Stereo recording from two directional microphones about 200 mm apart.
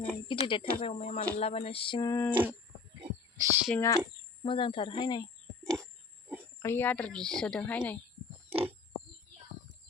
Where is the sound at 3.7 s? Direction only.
15° left (ahead or behind).